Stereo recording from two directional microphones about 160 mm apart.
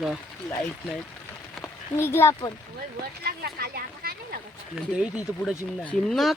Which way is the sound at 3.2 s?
80° right.